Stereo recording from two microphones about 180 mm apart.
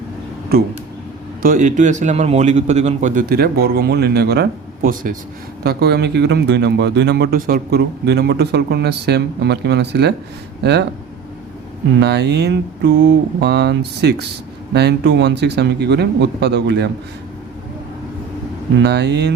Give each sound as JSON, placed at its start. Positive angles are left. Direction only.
{"t": 0.5, "sound": "a man's voice", "side_deg": -55}
{"t": 5.6, "sound": "speech", "side_deg": -65}
{"t": 11.9, "sound": "speech", "side_deg": -70}
{"t": 18.8, "sound": "speech", "side_deg": -65}